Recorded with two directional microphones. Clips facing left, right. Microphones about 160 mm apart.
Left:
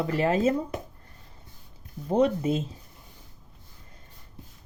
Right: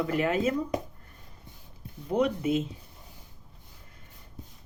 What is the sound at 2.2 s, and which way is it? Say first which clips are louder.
Speech: left 3 dB; 35° left (ahead or behind).